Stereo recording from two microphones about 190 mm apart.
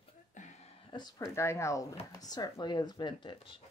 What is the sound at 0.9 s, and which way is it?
Speech, 20° left (ahead or behind).